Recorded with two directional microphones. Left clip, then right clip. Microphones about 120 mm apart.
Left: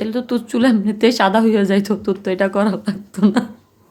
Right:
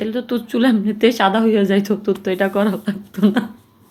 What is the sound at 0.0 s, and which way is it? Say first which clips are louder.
A woman's voice: left 1 dB; 35° left (ahead or behind).